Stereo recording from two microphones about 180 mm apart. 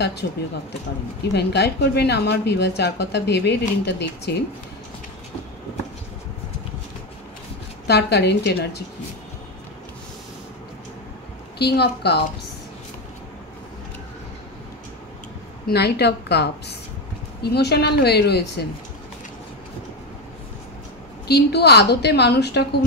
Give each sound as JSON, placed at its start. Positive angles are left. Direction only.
{"t": 1.3, "sound": "a woman's voice", "side_deg": 70}
{"t": 7.8, "sound": "a woman's voice", "side_deg": 65}
{"t": 11.5, "sound": "a woman's voice", "side_deg": 65}
{"t": 15.6, "sound": "a woman's voice", "side_deg": 65}
{"t": 21.3, "sound": "a woman's voice", "side_deg": 65}